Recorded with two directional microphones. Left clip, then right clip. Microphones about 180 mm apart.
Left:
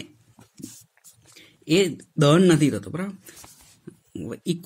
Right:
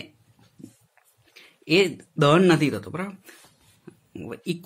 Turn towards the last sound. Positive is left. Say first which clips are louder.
# left 2 dB
turn(degrees=35)  # may be behind; listen again after turning